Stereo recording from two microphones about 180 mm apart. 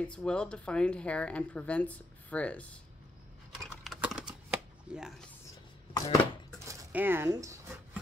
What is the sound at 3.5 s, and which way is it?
Typing, centre (ahead or behind).